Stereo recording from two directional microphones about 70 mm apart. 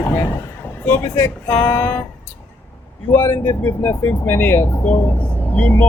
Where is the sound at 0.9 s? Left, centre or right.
Left.